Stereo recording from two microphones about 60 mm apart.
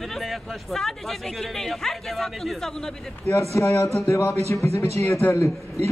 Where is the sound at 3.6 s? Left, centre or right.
Left.